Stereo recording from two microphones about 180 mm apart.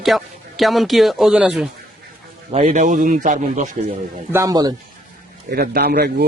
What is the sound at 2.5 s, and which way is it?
Speech, 40° right (ahead or behind).